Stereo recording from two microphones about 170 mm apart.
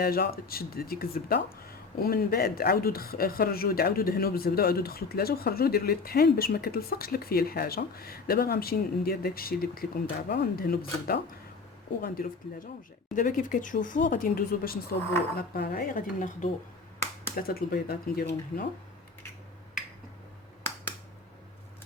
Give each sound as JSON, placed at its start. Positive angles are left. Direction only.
{"t": 0.0, "sound": "speech", "side_deg": 65}
{"t": 17.3, "sound": "speech", "side_deg": 60}